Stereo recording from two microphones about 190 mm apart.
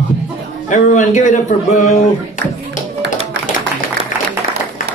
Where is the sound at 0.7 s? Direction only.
40° left (ahead or behind).